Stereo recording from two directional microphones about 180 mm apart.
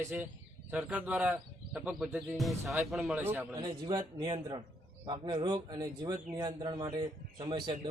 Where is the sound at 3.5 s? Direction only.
25° right (ahead or behind).